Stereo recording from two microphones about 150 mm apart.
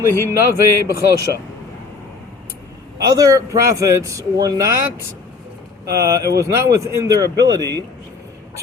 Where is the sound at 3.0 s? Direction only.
25° right (ahead or behind).